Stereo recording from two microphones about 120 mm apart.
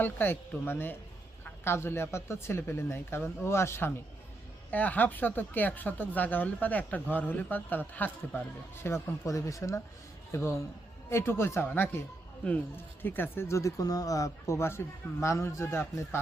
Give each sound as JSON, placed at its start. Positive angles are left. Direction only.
{"t": 0.0, "sound": "speech", "side_deg": 15}